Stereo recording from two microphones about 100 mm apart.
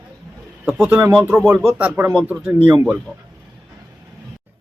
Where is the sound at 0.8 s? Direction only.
20° right (ahead or behind).